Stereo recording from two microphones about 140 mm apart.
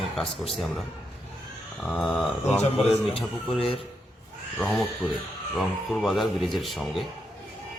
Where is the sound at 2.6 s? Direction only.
45° left (ahead or behind).